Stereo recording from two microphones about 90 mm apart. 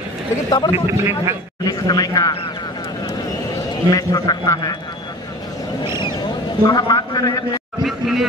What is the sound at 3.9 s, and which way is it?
Speech, 45° left (ahead or behind).